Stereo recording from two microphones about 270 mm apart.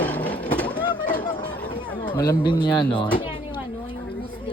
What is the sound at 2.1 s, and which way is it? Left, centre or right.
Speech, centre.